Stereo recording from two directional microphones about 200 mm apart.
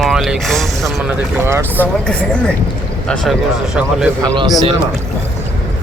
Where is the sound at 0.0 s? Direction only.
Centre (ahead or behind).